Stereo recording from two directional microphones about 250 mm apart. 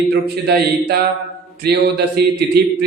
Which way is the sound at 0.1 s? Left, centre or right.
Right.